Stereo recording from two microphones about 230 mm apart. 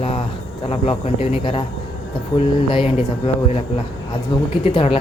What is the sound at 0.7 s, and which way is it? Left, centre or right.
Speech, left.